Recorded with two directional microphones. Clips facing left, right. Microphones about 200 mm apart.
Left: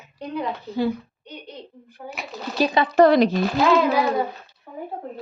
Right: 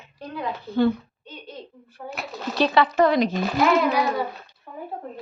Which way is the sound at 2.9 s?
40° left (ahead or behind).